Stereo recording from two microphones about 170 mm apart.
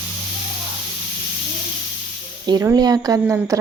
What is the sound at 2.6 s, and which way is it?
Speech, 20° right (ahead or behind).